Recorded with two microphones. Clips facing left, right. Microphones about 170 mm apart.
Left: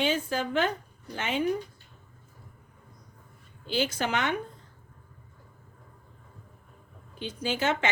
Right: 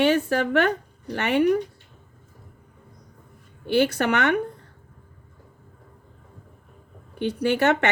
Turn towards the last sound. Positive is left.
turn(degrees=-65)  # may be behind; listen again after turning